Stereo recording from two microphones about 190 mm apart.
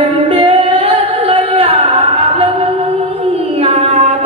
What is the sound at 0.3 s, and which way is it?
Singing, 30° right (ahead or behind).